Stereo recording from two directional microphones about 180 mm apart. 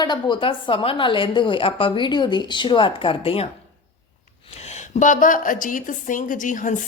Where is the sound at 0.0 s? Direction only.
25° left (ahead or behind).